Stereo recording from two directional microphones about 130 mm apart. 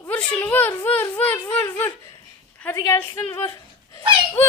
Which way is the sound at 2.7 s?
25° left (ahead or behind).